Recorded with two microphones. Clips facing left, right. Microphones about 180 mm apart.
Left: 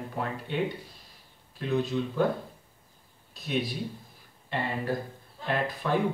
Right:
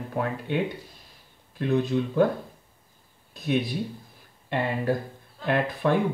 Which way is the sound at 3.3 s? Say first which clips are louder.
Right 5 dB; 55° right (ahead or behind).